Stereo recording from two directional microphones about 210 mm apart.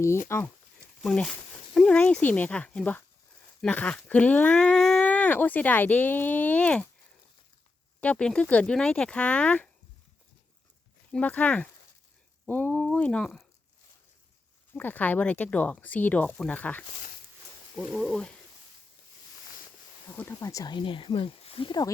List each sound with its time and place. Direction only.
0.3 s speech: 10° left (ahead or behind)
8.0 s speech: 5° left (ahead or behind)
11.1 s speech: 5° left (ahead or behind)
14.7 s speech: 10° left (ahead or behind)
20.1 s speech: 15° left (ahead or behind)